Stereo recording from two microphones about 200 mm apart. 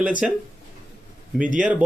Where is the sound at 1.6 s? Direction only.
5° right (ahead or behind).